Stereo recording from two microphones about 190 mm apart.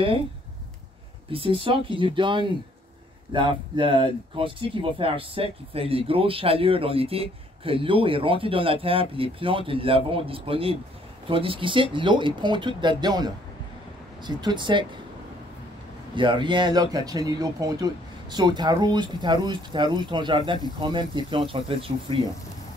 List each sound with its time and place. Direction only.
1.3 s speech: 30° right (ahead or behind)
16.2 s speech: 25° right (ahead or behind)